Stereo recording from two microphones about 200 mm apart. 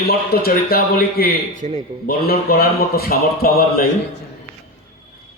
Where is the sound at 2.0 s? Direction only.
50° left (ahead or behind).